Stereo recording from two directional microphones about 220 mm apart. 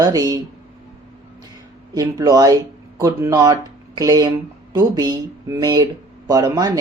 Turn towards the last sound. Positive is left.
turn(degrees=-15)  # may be behind; listen again after turning